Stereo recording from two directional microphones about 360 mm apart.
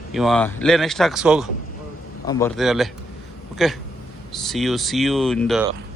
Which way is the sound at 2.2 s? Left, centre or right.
Centre.